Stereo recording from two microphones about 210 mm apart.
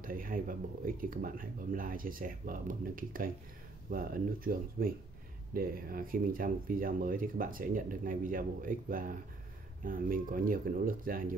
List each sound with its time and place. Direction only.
0.0 s speech: 40° right (ahead or behind)